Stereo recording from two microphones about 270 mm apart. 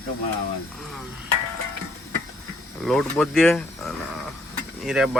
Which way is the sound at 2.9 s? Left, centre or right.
Centre.